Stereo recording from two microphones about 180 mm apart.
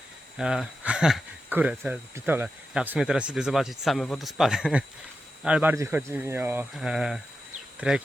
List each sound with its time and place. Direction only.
0.3 s speech: 5° right (ahead or behind)